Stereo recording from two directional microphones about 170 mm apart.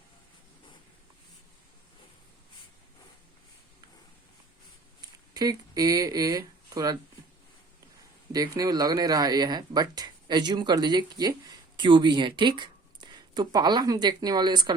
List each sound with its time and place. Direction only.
4.9 s speech: 20° right (ahead or behind)
8.3 s speech: 20° right (ahead or behind)